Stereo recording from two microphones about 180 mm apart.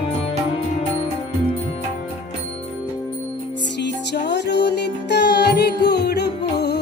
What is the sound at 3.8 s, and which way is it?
Music, 75° left (ahead or behind).